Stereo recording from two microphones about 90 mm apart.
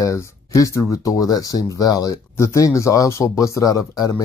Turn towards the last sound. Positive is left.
turn(degrees=40)  # may be behind; listen again after turning